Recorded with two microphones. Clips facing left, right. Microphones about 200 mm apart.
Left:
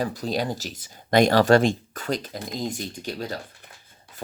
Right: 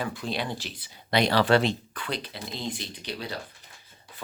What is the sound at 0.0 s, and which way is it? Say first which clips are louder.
Speech: left 5 dB; 40° left (ahead or behind).